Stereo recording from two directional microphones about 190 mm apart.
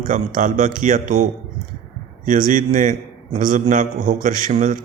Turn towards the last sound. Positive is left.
turn(degrees=-40)  # may be behind; listen again after turning